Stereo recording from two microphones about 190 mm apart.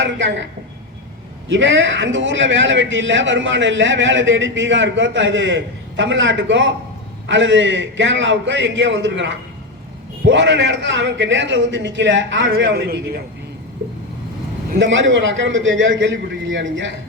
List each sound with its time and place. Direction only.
0.0 s a man's voice: 75° right (ahead or behind)
1.5 s a man's voice: 70° right (ahead or behind)
14.8 s a man's voice: 80° right